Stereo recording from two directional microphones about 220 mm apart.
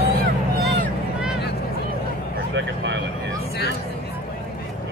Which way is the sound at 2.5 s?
55° right (ahead or behind).